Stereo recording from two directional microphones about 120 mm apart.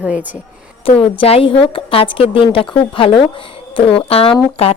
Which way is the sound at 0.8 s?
50° left (ahead or behind).